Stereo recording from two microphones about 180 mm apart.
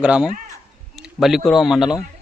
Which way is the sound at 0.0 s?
5° right (ahead or behind).